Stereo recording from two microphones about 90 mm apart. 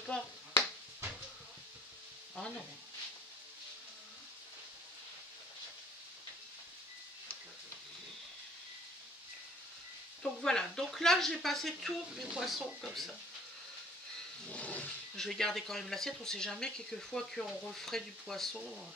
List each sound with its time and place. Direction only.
10.2 s speech: 5° left (ahead or behind)
14.4 s a sound: 15° left (ahead or behind)
15.1 s speech: 5° left (ahead or behind)